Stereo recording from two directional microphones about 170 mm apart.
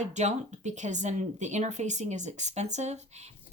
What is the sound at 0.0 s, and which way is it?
A woman's voice, 45° right (ahead or behind).